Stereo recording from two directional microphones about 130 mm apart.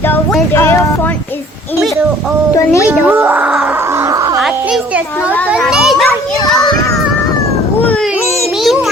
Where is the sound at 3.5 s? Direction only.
15° right (ahead or behind).